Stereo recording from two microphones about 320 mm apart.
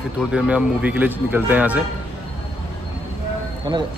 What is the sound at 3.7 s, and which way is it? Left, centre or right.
Speech, centre.